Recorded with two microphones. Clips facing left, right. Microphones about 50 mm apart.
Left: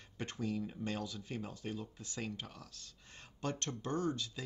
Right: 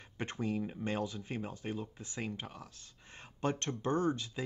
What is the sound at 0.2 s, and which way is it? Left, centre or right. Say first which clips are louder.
Speech: right 3 dB; right.